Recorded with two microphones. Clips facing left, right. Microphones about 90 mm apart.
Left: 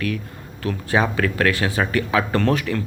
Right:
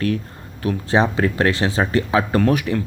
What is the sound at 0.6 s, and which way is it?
Speech, 20° right (ahead or behind).